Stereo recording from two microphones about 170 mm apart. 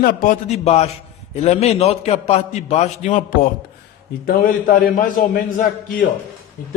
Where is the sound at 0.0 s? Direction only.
50° left (ahead or behind).